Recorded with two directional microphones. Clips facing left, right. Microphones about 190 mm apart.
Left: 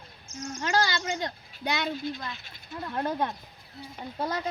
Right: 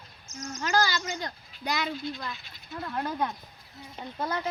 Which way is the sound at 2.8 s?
25° left (ahead or behind).